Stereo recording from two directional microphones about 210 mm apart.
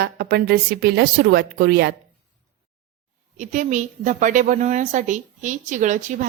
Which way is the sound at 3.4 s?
35° right (ahead or behind).